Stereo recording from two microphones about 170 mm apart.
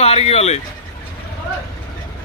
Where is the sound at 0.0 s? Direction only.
35° left (ahead or behind).